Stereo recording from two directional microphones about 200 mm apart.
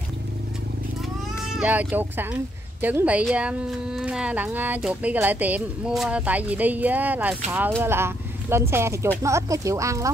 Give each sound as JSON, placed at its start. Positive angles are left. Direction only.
{"t": 1.4, "sound": "speech", "side_deg": -5}